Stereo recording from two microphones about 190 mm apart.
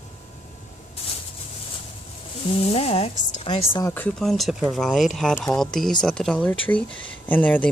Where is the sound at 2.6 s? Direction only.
30° left (ahead or behind).